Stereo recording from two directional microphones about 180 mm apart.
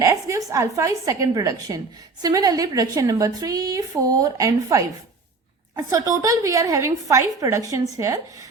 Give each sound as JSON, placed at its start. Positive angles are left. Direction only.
{"t": 0.0, "sound": "a woman's voice", "side_deg": -15}